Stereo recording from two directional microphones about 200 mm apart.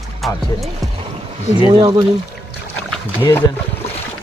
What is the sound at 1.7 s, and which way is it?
Speech, 20° right (ahead or behind).